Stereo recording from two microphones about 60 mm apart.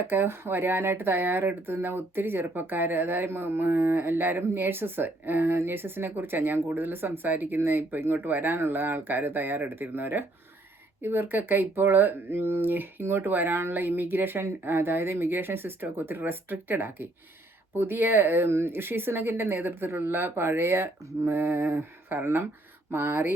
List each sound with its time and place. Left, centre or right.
0.0 s speech: right